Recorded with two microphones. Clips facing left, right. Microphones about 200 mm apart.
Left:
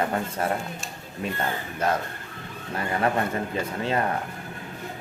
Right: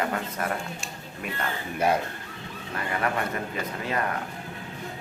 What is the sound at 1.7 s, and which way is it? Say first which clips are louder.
Speech: right 2 dB; 10° right (ahead or behind).